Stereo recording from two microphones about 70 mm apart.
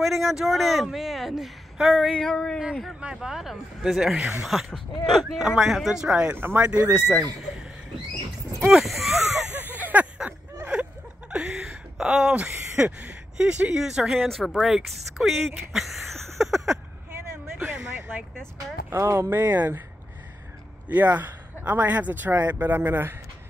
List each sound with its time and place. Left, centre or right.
0.0 s a man's voice: centre
2.1 s speech: centre
3.0 s speech: centre
4.5 s a man's voice: centre
6.3 s speech: right
6.6 s speech: centre
8.5 s a man's voice: centre
9.5 s a sound: right; by 12.4 s centre
12.8 s speech: centre
18.9 s speech: right
19.3 s speech: right
20.9 s speech: right